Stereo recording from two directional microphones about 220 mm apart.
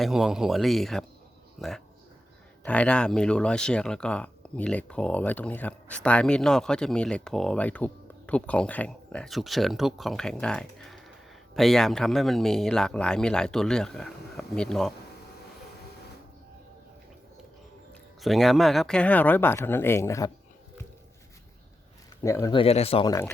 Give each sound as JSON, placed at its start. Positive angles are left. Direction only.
{"t": 0.0, "sound": "speech", "side_deg": 0}
{"t": 18.2, "sound": "speech", "side_deg": 0}
{"t": 22.2, "sound": "speech", "side_deg": 15}